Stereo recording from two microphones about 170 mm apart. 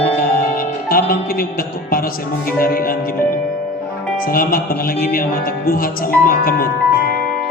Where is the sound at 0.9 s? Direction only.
60° left (ahead or behind).